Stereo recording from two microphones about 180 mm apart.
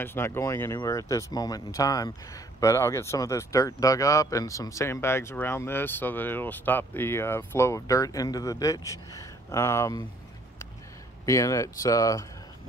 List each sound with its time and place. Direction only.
0.0 s speech: 15° left (ahead or behind)
11.2 s speech: 15° left (ahead or behind)